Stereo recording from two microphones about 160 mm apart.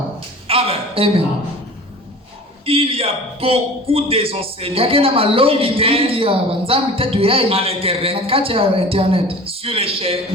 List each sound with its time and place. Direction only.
0.4 s a man's voice: 35° right (ahead or behind)
2.6 s a man's voice: 35° right (ahead or behind)